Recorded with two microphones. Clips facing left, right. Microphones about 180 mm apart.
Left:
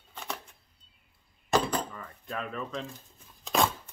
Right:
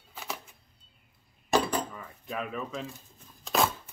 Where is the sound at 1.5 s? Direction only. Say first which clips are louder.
Right 1 dB; 10° right (ahead or behind).